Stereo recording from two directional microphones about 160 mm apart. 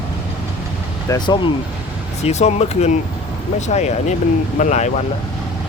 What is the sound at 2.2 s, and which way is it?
Speech, 45° left (ahead or behind).